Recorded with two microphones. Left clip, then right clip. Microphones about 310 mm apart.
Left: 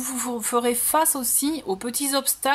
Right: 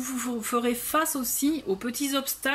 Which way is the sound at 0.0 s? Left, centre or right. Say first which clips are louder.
Left 3 dB; centre.